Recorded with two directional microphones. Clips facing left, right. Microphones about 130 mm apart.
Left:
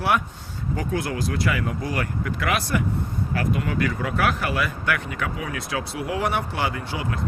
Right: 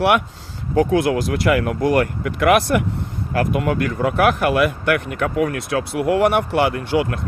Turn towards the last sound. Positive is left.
turn(degrees=-65)  # may be behind; listen again after turning